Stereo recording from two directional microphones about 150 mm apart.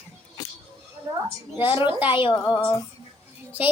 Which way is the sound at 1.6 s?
30° left (ahead or behind).